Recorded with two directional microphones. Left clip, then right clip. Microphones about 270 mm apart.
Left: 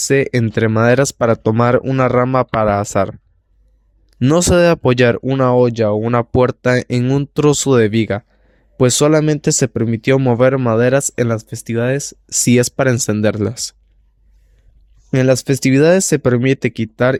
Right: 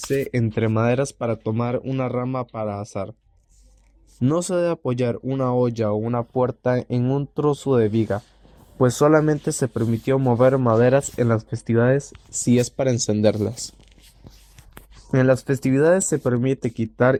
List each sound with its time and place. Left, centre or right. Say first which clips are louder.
0.1 s speech: left 8 dB; left
4.2 s speech: left 9 dB; left
9.0 s speech: left 4 dB; left
15.1 s speech: left 5 dB; left